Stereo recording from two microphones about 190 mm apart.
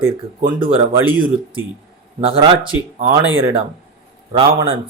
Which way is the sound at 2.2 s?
30° right (ahead or behind).